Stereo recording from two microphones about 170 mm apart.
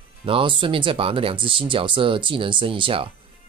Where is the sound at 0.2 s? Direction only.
30° right (ahead or behind).